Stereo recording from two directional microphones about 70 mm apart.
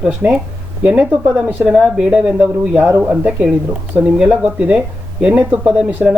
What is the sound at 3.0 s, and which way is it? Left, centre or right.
Speech, centre.